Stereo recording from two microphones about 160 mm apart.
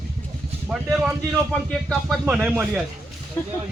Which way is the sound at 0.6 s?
5° right (ahead or behind).